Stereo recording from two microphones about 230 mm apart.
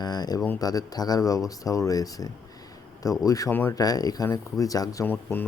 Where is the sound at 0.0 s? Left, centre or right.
Centre.